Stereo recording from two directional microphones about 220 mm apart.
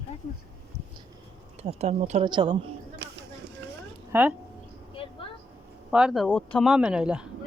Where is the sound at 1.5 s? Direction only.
30° right (ahead or behind).